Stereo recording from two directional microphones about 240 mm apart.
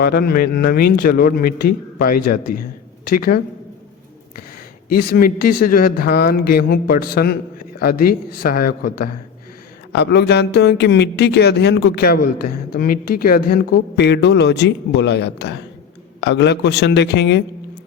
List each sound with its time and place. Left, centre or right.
0.0 s a man's voice: left
5.1 s a man's voice: left